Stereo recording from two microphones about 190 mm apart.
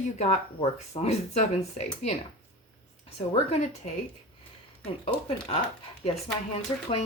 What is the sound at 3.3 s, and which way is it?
Speech, 35° left (ahead or behind).